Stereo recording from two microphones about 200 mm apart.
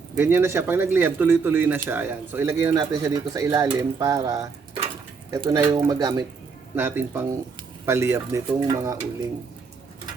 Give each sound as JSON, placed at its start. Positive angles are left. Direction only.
{"t": 0.2, "sound": "speech", "side_deg": -10}